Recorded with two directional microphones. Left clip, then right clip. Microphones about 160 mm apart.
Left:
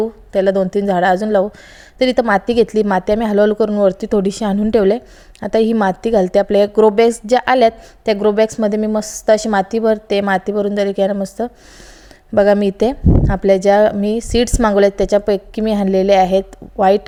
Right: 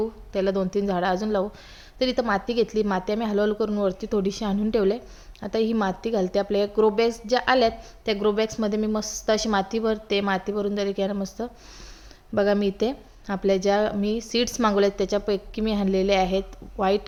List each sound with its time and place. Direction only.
0.0 s a woman's voice: 45° left (ahead or behind)